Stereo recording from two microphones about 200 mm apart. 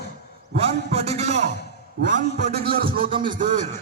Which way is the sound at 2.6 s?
45° right (ahead or behind).